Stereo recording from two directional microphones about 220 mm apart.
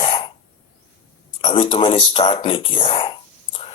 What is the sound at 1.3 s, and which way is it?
Speech, 25° left (ahead or behind).